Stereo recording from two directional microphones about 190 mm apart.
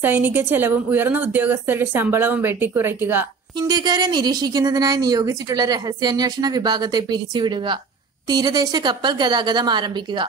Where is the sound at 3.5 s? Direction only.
20° right (ahead or behind).